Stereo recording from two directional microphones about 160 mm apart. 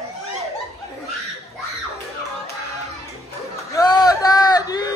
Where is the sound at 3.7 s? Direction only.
25° left (ahead or behind).